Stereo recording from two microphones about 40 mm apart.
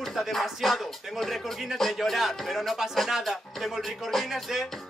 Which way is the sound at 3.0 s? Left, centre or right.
Centre.